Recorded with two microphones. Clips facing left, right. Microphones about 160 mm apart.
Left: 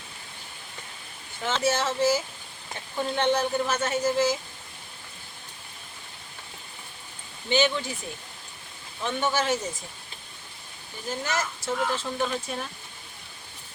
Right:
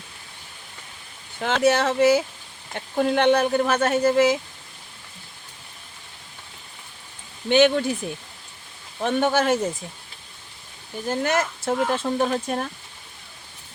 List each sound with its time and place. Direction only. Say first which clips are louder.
1.4 s speech: right 6 dB; 65° right (ahead or behind)
7.5 s speech: right 7 dB; 55° right (ahead or behind)
9.0 s speech: right 6 dB; 55° right (ahead or behind)
11.1 s speech: right 7 dB; 60° right (ahead or behind)